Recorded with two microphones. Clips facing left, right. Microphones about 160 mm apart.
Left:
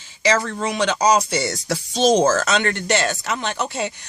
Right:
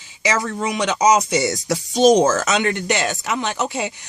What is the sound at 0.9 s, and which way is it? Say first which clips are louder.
Speech: right 4 dB; 20° right (ahead or behind).